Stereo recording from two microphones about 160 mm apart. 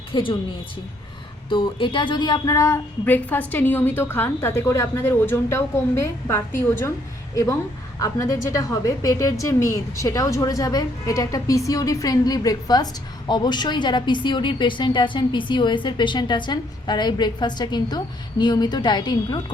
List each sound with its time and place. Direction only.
0.1 s a woman's voice: 30° left (ahead or behind)
1.5 s a woman's voice: 30° left (ahead or behind)
7.9 s a woman's voice: 20° left (ahead or behind)